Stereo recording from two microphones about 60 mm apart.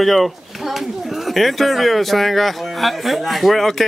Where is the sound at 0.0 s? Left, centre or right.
Centre.